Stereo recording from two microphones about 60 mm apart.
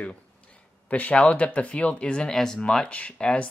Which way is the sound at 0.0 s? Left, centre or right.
Left.